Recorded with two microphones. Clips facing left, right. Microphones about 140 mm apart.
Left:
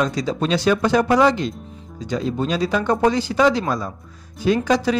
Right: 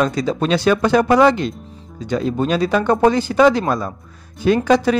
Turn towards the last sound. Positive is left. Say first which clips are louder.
# right 4 dB
turn(degrees=-55)  # may be behind; listen again after turning